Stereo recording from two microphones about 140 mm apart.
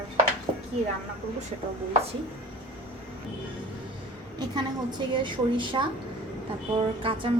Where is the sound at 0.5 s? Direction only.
45° right (ahead or behind).